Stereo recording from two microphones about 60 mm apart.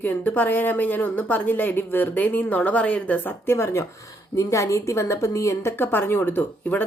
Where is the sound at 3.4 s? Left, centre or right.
Left.